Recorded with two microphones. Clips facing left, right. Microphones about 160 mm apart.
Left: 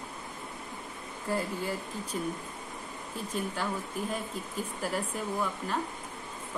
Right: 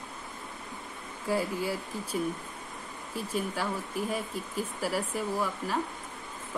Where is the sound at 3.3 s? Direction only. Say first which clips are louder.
Right 1 dB; 5° right (ahead or behind).